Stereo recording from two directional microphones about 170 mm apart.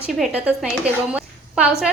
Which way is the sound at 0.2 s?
5° right (ahead or behind).